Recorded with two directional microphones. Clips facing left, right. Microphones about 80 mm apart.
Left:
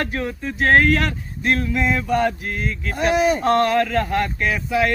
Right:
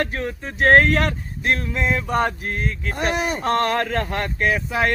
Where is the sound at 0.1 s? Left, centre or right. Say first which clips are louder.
Left 2 dB; right.